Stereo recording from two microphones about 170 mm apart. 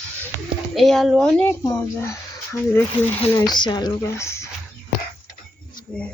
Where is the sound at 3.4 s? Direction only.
25° left (ahead or behind).